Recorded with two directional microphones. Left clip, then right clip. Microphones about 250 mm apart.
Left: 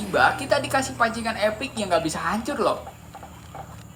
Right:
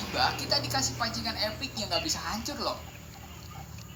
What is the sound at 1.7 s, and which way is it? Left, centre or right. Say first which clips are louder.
Speech: left 8 dB; left.